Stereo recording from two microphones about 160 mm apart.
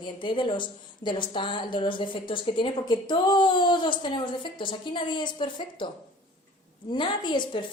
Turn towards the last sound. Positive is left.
turn(degrees=30)  # may be behind; listen again after turning